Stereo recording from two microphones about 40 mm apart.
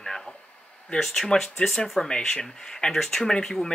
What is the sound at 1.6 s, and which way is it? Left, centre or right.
Speech, centre.